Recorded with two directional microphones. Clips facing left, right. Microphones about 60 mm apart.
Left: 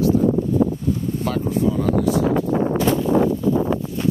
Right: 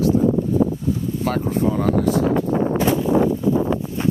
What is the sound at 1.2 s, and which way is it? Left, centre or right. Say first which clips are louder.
Speech: right 1 dB; right.